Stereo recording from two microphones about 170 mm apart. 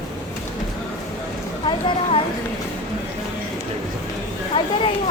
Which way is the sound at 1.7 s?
30° left (ahead or behind).